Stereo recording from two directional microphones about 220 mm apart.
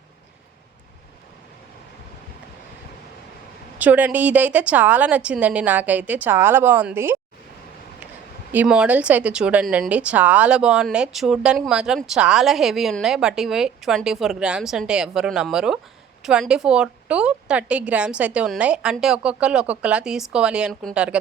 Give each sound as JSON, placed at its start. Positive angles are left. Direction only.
{"t": 3.8, "sound": "a woman's voice", "side_deg": -5}
{"t": 8.5, "sound": "speech", "side_deg": -5}